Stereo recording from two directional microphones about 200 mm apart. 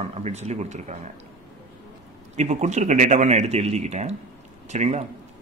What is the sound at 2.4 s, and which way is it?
Speech, 35° right (ahead or behind).